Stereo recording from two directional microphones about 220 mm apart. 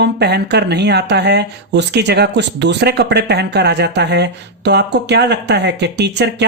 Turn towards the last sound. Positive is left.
turn(degrees=-50)  # may be behind; listen again after turning